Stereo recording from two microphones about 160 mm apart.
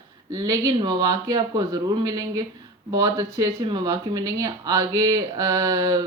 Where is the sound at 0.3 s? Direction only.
20° right (ahead or behind).